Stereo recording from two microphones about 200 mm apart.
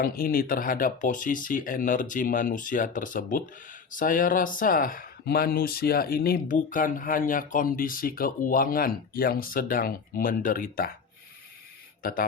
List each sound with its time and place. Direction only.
0.0 s speech: 45° left (ahead or behind)